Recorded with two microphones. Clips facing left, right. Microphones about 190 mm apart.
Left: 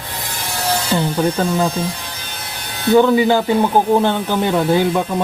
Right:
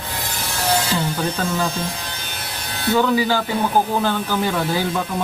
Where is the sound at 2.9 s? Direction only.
25° left (ahead or behind).